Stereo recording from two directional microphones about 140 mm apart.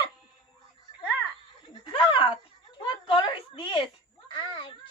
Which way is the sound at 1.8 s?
35° left (ahead or behind).